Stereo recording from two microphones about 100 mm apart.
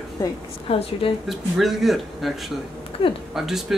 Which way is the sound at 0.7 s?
70° left (ahead or behind).